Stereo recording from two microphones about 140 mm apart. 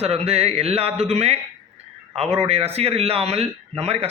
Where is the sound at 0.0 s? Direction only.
50° right (ahead or behind).